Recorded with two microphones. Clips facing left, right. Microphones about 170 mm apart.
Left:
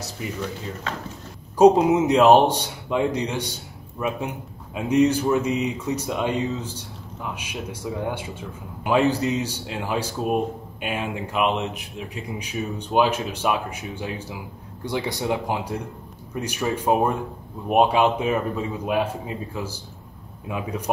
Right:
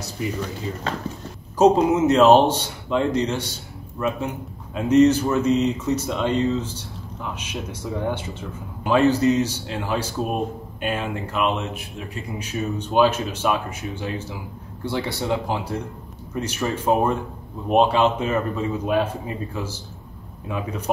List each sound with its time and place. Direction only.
0.9 s speech: 35° right (ahead or behind)
1.6 s speech: 15° left (ahead or behind)
4.7 s speech: 15° left (ahead or behind)